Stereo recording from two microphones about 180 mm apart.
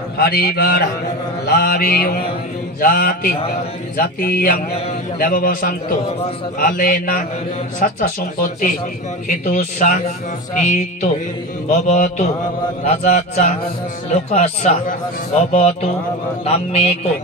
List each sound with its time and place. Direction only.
0.2 s mantra: 60° left (ahead or behind)
2.8 s speech: 55° left (ahead or behind)
11.7 s speech: 40° left (ahead or behind)